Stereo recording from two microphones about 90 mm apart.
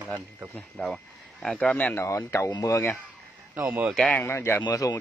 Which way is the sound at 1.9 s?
30° left (ahead or behind).